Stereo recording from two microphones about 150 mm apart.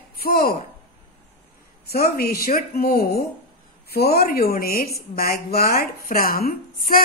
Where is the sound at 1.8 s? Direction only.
90° left.